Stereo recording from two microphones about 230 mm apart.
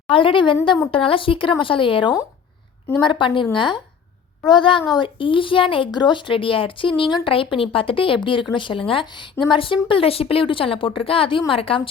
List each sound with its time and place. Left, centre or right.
0.1 s speech: left